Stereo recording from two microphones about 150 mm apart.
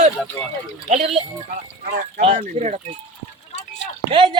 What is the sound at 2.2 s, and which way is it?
Speech, 45° right (ahead or behind).